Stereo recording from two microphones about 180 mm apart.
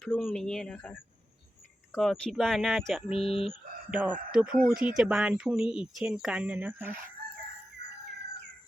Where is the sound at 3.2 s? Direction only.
30° left (ahead or behind).